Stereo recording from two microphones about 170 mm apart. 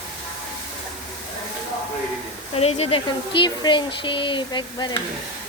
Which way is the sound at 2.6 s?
35° left (ahead or behind).